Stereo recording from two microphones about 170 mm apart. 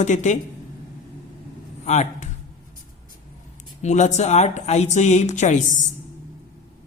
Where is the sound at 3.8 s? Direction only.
45° left (ahead or behind).